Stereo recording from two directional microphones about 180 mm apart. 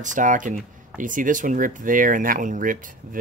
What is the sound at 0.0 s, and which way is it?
Speech, 45° right (ahead or behind).